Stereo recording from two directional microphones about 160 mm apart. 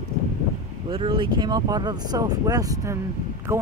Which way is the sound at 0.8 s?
30° right (ahead or behind).